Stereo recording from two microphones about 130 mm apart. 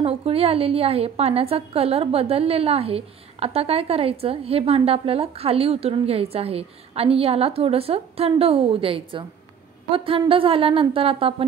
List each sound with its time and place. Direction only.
0.0 s a woman's voice: 50° right (ahead or behind)